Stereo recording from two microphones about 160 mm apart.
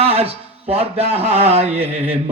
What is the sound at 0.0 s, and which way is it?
A man's voice, 40° right (ahead or behind).